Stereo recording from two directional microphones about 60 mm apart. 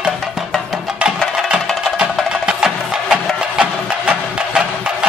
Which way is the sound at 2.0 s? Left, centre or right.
Centre.